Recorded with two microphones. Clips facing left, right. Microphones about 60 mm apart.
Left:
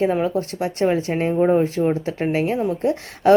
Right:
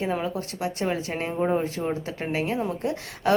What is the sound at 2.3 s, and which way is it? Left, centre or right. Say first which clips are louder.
A woman's voice: left 4 dB; left.